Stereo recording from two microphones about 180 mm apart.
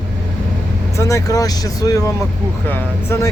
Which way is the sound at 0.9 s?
15° left (ahead or behind).